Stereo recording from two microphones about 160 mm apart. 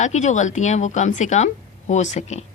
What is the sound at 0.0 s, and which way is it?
Speech, 50° left (ahead or behind).